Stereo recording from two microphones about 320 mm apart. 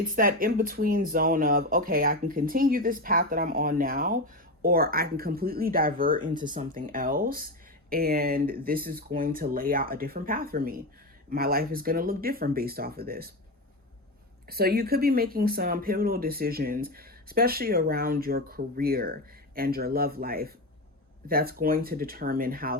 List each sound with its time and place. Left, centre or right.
0.2 s speech: right
14.4 s speech: right